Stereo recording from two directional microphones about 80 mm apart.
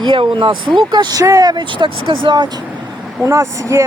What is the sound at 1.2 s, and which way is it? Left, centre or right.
Speech, right.